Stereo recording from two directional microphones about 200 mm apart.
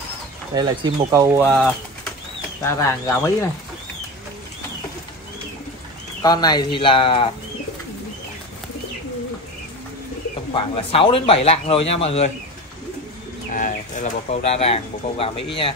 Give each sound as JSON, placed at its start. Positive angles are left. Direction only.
{"t": 0.6, "sound": "speech", "side_deg": -20}
{"t": 1.4, "sound": "speech", "side_deg": 5}
{"t": 2.6, "sound": "speech", "side_deg": 15}
{"t": 6.2, "sound": "speech", "side_deg": 20}
{"t": 10.5, "sound": "speech", "side_deg": 25}
{"t": 13.5, "sound": "speech", "side_deg": 40}